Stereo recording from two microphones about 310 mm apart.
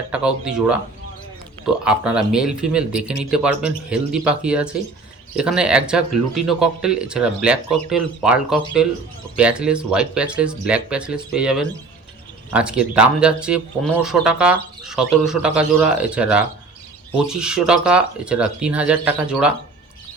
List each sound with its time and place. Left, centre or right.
0.1 s speech: centre